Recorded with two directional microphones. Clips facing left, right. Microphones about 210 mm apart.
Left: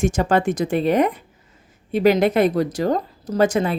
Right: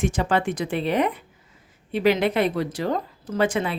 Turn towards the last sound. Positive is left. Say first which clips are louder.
# left 5 dB
turn(degrees=40)  # may be behind; listen again after turning